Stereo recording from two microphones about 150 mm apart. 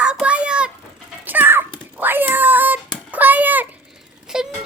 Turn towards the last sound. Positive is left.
turn(degrees=-5)  # may be behind; listen again after turning